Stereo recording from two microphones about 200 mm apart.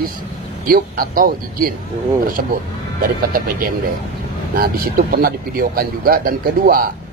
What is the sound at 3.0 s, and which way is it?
A man's voice, 45° right (ahead or behind).